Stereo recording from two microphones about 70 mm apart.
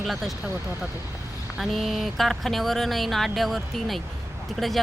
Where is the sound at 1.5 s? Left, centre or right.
Centre.